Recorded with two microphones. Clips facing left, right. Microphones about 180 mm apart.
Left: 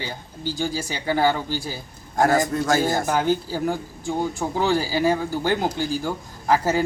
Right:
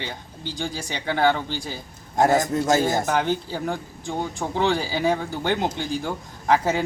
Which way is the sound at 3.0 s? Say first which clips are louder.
Left 2 dB; 5° left (ahead or behind).